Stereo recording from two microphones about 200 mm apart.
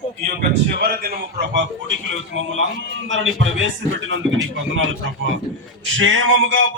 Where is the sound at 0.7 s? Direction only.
50° right (ahead or behind); by 4.2 s 70° right (ahead or behind).